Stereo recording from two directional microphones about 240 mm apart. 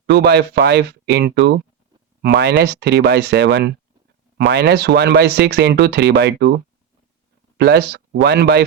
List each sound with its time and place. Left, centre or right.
0.0 s speech: right
7.6 s speech: right